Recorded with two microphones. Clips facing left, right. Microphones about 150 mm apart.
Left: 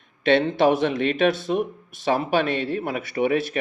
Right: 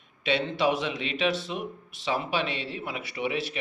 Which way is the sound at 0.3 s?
55° left (ahead or behind).